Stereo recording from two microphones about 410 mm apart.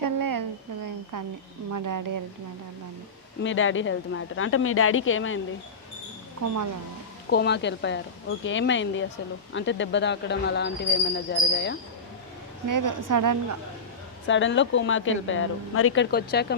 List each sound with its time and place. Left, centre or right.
0.2 s a sound: right
1.7 s a woman's voice: right
3.4 s speech: left
7.3 s speech: left
12.6 s a woman's voice: right
14.3 s speech: left